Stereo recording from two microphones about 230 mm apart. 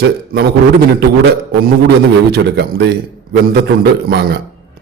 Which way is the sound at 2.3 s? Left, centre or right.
Right.